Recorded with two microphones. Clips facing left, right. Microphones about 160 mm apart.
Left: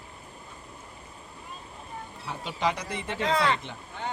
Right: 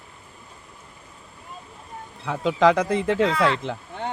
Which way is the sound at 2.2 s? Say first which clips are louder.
Right 11 dB; 90° right.